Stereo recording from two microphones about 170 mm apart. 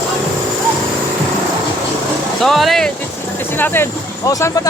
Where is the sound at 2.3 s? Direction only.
Centre (ahead or behind).